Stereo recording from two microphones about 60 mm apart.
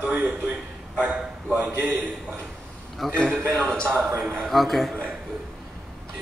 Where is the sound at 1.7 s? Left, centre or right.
Right.